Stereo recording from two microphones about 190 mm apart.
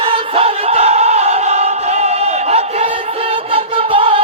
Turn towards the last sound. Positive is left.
turn(degrees=-30)  # may be behind; listen again after turning